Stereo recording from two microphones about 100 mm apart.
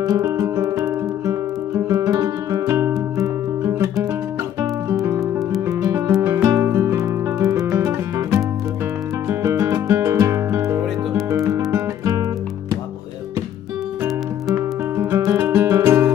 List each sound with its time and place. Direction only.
0.0 s music: 35° right (ahead or behind)
5.0 s music: 25° right (ahead or behind)
14.5 s music: 25° right (ahead or behind)